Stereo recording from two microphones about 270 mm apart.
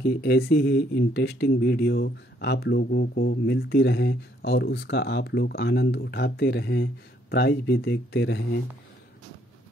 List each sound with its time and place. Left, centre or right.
0.0 s speech: left